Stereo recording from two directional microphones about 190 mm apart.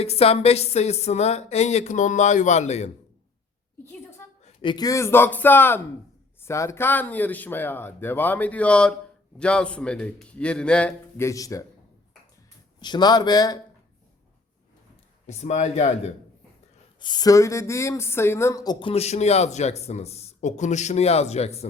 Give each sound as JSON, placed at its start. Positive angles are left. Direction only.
{"t": 0.0, "sound": "a woman's voice", "side_deg": 30}
{"t": 4.4, "sound": "a man's voice", "side_deg": 25}
{"t": 12.8, "sound": "a man's voice", "side_deg": 20}
{"t": 15.3, "sound": "a woman's voice", "side_deg": 35}
{"t": 17.0, "sound": "a woman's voice", "side_deg": 20}